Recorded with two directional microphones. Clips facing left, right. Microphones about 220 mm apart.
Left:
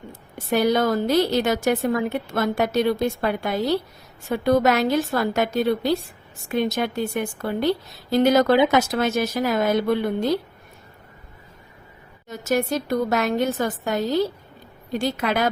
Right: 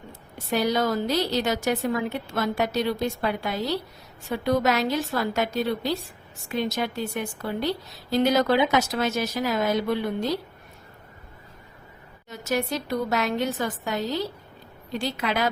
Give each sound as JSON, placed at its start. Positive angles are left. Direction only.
{"t": 0.5, "sound": "a woman's voice", "side_deg": 55}
{"t": 12.3, "sound": "a woman's voice", "side_deg": 45}